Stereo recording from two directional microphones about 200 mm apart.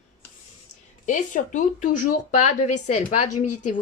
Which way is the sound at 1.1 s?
40° left (ahead or behind).